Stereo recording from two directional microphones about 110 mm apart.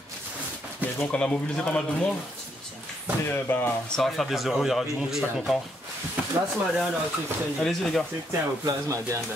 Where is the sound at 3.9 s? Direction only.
Centre (ahead or behind).